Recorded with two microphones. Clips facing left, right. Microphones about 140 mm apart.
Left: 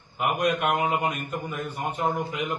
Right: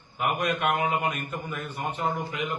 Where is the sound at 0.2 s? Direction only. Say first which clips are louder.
Left 2 dB; 5° left (ahead or behind).